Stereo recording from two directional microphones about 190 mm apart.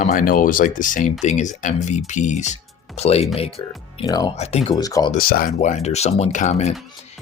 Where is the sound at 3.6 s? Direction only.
20° left (ahead or behind).